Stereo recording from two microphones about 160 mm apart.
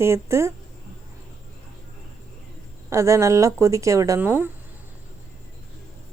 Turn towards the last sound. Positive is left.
turn(degrees=-15)  # may be behind; listen again after turning